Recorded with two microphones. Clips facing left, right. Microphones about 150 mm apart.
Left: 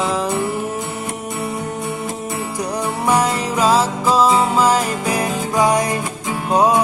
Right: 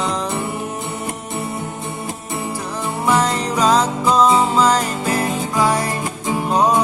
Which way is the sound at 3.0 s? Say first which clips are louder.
Even; 10° left (ahead or behind).